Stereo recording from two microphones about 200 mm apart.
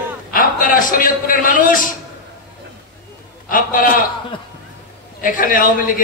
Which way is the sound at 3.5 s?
45° left (ahead or behind).